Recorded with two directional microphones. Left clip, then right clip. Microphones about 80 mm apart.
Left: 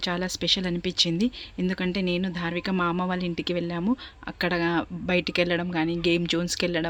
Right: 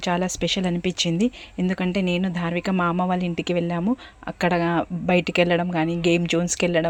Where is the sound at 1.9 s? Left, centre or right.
Centre.